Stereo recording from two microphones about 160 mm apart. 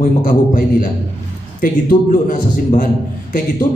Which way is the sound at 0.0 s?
60° left (ahead or behind).